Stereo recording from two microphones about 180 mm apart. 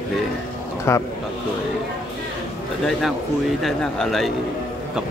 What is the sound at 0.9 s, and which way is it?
Speech, 15° left (ahead or behind).